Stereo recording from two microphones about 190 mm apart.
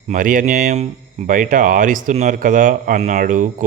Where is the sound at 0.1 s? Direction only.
45° right (ahead or behind).